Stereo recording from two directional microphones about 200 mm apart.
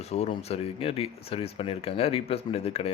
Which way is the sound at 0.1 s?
30° left (ahead or behind).